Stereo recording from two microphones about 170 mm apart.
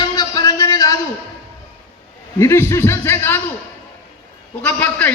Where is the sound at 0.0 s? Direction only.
25° left (ahead or behind).